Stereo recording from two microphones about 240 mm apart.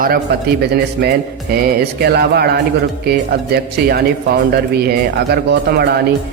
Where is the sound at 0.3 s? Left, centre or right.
Right.